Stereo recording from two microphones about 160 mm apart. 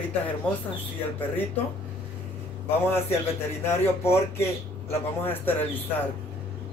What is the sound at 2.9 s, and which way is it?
Speech, 15° left (ahead or behind).